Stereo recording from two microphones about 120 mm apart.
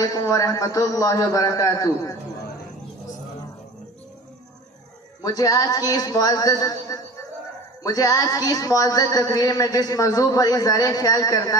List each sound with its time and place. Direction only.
0.0 s a man's voice: 30° left (ahead or behind)
5.2 s a man's voice: 30° left (ahead or behind)